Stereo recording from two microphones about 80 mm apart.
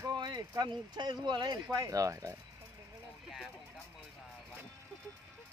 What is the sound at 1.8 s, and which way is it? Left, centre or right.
Speech, right.